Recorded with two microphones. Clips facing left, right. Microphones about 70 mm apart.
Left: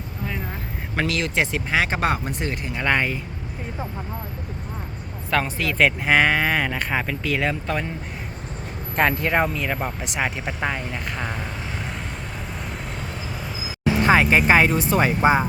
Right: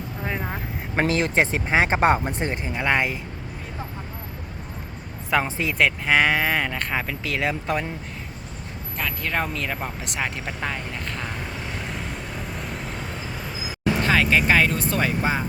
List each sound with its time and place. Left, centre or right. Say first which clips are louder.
0.9 s speech: right 2 dB; right
2.7 s speech: left 1 dB; centre
5.3 s speech: even; centre
5.7 s speech: left 2 dB; centre
9.2 s speech: left 5 dB; centre
9.5 s speech: left 3 dB; centre
13.7 s vehicle: left 2 dB; centre
14.0 s speech: left 4 dB; left